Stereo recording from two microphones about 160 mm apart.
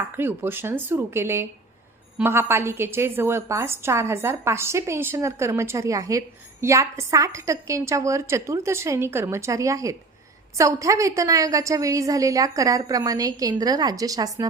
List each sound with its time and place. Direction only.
0.2 s a woman's voice: 15° right (ahead or behind)